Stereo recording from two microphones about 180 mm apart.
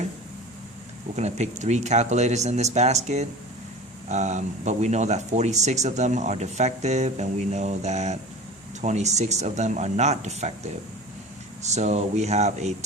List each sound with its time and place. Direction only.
1.1 s speech: 40° right (ahead or behind)